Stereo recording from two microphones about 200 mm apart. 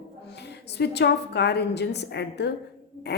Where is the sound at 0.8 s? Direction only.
55° left (ahead or behind).